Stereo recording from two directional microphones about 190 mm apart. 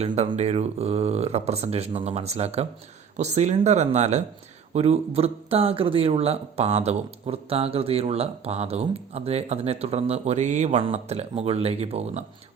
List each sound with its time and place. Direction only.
0.0 s speech: 35° right (ahead or behind)